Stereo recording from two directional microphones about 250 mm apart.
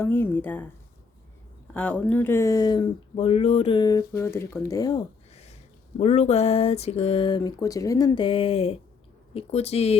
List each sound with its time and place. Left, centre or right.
0.0 s speech: centre
1.7 s speech: centre
5.3 s a sound: left
6.0 s speech: left